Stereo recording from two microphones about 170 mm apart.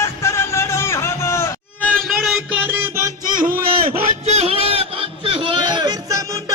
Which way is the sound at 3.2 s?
50° right (ahead or behind).